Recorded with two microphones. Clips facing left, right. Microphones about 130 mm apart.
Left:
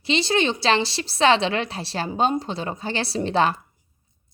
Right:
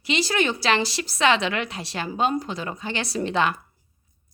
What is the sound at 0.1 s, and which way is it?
A woman's voice, 25° left (ahead or behind).